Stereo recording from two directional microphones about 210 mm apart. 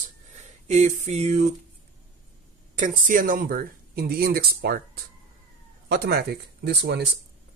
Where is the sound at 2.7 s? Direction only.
40° right (ahead or behind).